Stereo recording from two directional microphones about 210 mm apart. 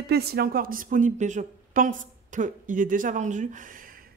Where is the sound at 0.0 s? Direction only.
50° right (ahead or behind).